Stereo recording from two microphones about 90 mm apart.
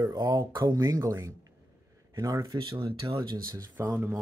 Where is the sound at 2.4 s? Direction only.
65° right (ahead or behind).